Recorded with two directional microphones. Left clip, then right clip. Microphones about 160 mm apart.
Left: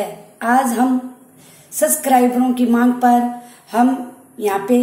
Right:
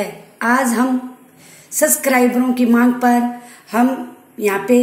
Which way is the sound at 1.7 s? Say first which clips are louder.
Even; 45° right (ahead or behind).